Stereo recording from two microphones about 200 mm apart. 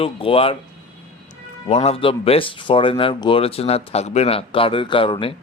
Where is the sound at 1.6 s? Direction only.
30° left (ahead or behind).